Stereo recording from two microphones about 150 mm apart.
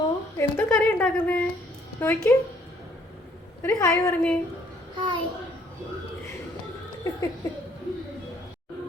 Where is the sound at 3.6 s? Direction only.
20° left (ahead or behind).